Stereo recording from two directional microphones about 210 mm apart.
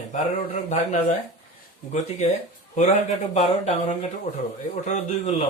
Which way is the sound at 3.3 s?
30° left (ahead or behind).